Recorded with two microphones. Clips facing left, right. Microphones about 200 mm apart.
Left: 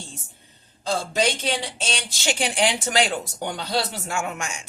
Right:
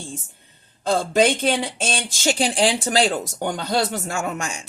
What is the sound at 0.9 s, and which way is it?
Speech, 55° right (ahead or behind).